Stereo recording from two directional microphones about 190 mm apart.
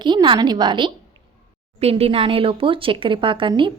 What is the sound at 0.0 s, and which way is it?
Speech, 25° right (ahead or behind).